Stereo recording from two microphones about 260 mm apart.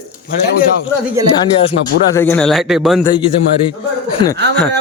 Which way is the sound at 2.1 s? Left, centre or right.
Centre.